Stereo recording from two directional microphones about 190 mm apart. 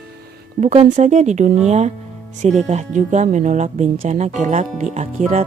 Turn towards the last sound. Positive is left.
turn(degrees=-40)  # may be behind; listen again after turning